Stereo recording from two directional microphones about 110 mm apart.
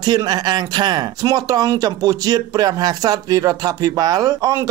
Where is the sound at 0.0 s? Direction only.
40° right (ahead or behind).